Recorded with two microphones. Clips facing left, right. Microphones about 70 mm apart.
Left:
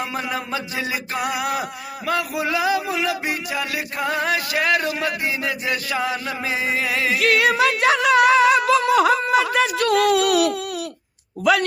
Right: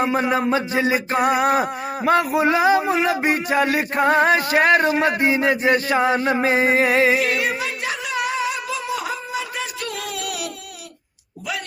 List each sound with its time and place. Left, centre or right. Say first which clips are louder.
0.0 s speech: right 7 dB; right
7.2 s a sound: left 4 dB; left
11.5 s speech: left 11 dB; left